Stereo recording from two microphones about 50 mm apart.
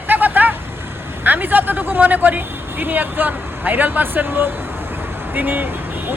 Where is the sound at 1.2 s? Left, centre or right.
Right.